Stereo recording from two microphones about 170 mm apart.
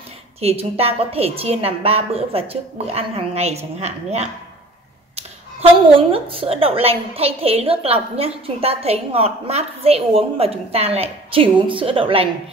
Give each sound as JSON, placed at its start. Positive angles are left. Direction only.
{"t": 0.4, "sound": "a woman's voice", "side_deg": -35}